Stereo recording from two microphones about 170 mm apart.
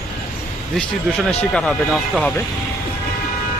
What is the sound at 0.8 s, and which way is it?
Speech, centre (ahead or behind).